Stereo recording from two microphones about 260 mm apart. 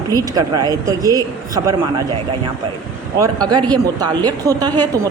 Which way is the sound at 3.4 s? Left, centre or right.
Centre.